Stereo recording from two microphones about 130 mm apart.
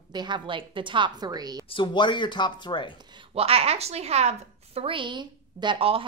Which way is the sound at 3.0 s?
35° right (ahead or behind).